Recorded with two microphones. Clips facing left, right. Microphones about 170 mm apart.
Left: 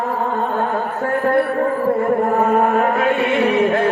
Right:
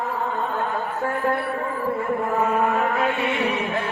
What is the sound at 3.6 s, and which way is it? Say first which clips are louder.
Music: left 10 dB; 55° left (ahead or behind).